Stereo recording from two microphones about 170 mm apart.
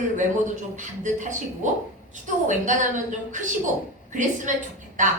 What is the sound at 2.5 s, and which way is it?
Speech, 45° right (ahead or behind).